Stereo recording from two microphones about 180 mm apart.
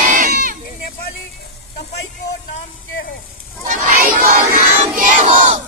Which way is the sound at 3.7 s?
50° right (ahead or behind).